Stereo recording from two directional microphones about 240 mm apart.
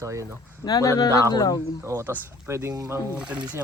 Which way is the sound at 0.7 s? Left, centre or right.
Centre.